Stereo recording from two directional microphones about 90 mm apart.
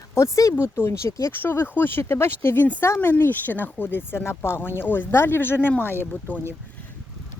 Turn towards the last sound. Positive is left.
turn(degrees=20)  # may be behind; listen again after turning